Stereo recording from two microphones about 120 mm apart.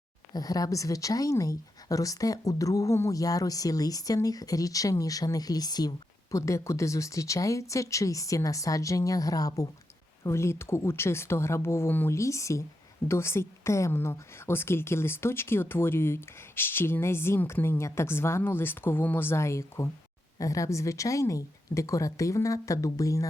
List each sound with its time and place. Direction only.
0.3 s speech: 30° left (ahead or behind)